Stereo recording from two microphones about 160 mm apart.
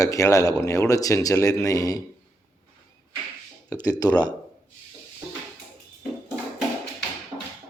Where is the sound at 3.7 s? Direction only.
20° left (ahead or behind).